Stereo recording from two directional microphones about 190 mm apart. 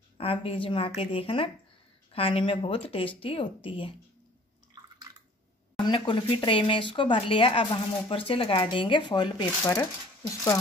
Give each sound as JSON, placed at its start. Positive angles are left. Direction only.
{"t": 0.2, "sound": "speech", "side_deg": 30}
{"t": 5.9, "sound": "speech", "side_deg": 25}